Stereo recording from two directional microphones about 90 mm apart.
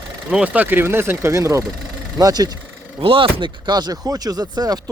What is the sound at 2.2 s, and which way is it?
Speech, 45° right (ahead or behind).